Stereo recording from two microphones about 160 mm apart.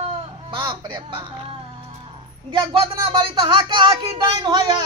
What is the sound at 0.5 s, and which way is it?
Speech, 30° right (ahead or behind).